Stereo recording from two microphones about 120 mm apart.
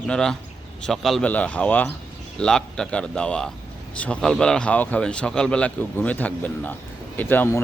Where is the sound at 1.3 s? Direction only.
10° left (ahead or behind).